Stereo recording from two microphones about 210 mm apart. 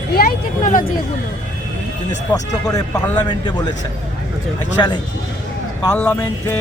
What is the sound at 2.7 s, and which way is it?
Speech, 15° left (ahead or behind).